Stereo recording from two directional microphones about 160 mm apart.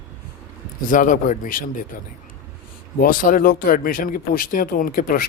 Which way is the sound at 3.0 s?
60° left (ahead or behind).